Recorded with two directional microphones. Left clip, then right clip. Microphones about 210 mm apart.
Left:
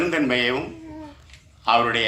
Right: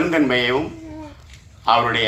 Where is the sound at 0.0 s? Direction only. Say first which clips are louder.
Right 3 dB; 50° left (ahead or behind).